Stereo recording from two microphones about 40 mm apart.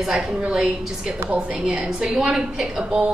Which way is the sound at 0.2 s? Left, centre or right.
Right.